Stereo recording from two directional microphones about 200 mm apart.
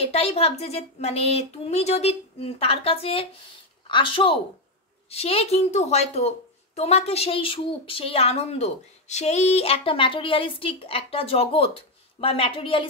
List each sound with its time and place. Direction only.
0.0 s a woman's voice: 30° left (ahead or behind)